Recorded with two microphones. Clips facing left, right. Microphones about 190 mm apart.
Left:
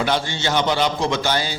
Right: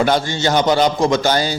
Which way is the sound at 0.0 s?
45° right (ahead or behind).